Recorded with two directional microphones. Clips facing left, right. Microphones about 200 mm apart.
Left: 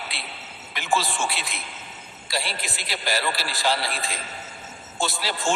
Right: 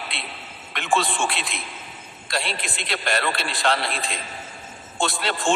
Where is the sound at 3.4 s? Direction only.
Centre (ahead or behind).